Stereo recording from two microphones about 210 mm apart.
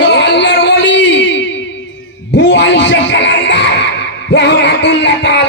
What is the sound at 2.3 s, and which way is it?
Music, 55° left (ahead or behind).